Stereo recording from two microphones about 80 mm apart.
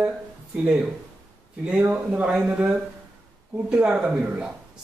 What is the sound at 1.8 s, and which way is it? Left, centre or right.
Speech, centre.